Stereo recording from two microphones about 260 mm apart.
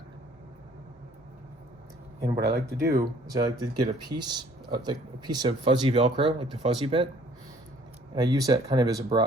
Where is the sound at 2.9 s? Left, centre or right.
Centre.